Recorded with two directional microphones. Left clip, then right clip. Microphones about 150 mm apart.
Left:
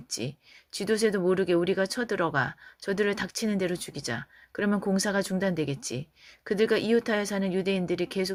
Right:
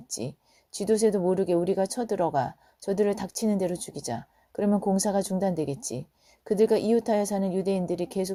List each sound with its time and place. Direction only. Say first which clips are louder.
0.1 s speech: left 1 dB; 45° right (ahead or behind)